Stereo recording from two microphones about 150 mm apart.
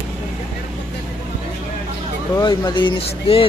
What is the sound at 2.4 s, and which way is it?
Speech, 30° left (ahead or behind).